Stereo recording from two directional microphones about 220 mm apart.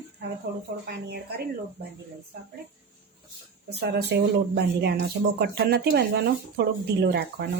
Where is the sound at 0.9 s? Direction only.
45° right (ahead or behind).